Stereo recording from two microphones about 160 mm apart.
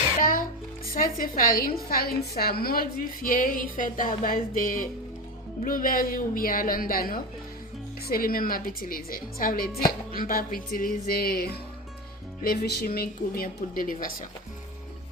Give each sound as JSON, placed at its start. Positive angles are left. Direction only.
{"t": 0.2, "sound": "music", "side_deg": 60}
{"t": 0.9, "sound": "a woman's voice", "side_deg": 60}